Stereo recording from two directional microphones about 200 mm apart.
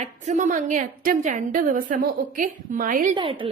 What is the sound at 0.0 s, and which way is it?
A woman's voice, 40° right (ahead or behind).